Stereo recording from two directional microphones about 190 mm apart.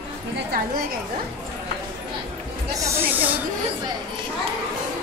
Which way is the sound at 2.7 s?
15° right (ahead or behind).